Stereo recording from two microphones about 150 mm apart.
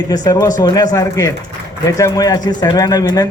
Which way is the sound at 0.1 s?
25° left (ahead or behind).